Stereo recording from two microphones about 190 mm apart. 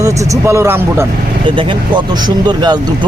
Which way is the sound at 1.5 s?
25° right (ahead or behind).